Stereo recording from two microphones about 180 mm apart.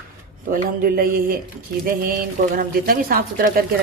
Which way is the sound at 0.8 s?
55° right (ahead or behind).